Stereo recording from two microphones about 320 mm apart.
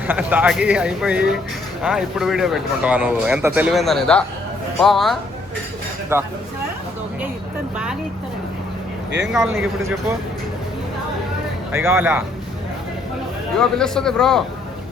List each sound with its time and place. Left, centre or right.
0.1 s speech: centre
9.5 s speech: right
11.7 s speech: centre
13.6 s speech: centre